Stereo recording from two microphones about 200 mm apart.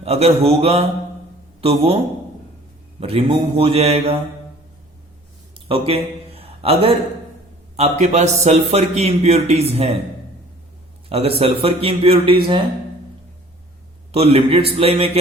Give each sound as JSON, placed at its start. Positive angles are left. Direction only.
{"t": 0.0, "sound": "a man's voice", "side_deg": -30}
{"t": 3.0, "sound": "a man's voice", "side_deg": -30}
{"t": 5.6, "sound": "a man's voice", "side_deg": -30}
{"t": 11.1, "sound": "a man's voice", "side_deg": -30}
{"t": 14.1, "sound": "a man's voice", "side_deg": -30}